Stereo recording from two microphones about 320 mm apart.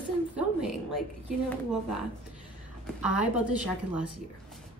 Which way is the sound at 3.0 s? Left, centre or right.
Left.